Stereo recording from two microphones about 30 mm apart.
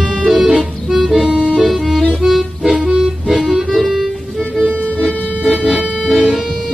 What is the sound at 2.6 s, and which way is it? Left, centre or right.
Music, right.